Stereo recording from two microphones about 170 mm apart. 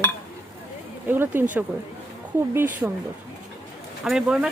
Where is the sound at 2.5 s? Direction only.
15° right (ahead or behind).